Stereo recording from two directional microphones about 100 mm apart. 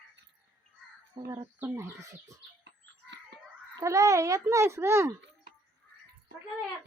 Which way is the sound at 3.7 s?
30° right (ahead or behind).